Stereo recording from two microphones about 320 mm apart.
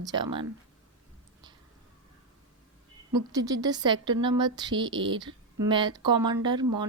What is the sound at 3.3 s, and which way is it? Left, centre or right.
A woman's voice, centre.